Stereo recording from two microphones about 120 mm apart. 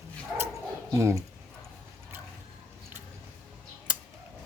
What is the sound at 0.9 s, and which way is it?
Speech, 25° right (ahead or behind).